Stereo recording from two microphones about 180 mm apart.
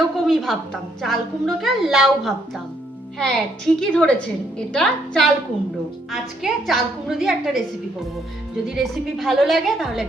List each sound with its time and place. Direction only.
0.0 s a woman's voice: centre (ahead or behind)
8.7 s a woman's voice: centre (ahead or behind)